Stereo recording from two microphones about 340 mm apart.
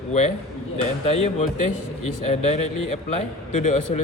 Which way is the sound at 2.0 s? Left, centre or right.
Left.